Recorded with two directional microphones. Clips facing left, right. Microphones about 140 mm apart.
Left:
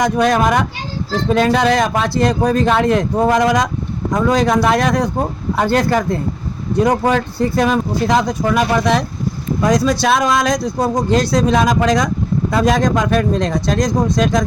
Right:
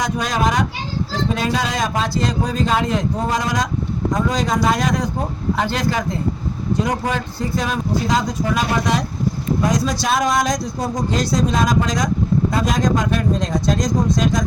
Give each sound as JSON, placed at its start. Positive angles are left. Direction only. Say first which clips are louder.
{"t": 0.0, "sound": "a man's voice", "louder": "left 6 dB", "side_deg": 55}
{"t": 12.5, "sound": "a man's voice", "louder": "left 8 dB", "side_deg": 75}